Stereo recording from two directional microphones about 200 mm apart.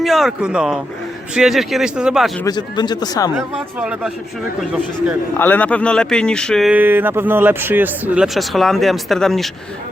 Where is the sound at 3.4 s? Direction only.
5° right (ahead or behind).